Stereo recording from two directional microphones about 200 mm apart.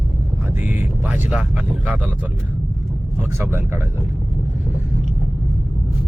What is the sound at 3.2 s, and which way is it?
Speech, 10° right (ahead or behind).